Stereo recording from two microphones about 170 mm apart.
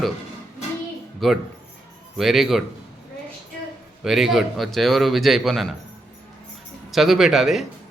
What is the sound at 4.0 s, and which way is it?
Speech, centre (ahead or behind).